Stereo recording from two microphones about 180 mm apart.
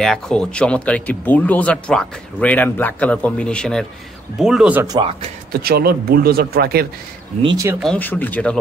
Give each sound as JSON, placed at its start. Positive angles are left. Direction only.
{"t": 0.0, "sound": "speech", "side_deg": 5}
{"t": 4.8, "sound": "speech", "side_deg": -25}
{"t": 5.6, "sound": "speech", "side_deg": -60}
{"t": 7.4, "sound": "speech", "side_deg": -20}
{"t": 7.8, "sound": "speech", "side_deg": 10}